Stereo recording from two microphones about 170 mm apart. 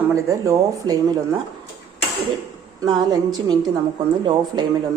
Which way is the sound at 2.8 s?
25° right (ahead or behind).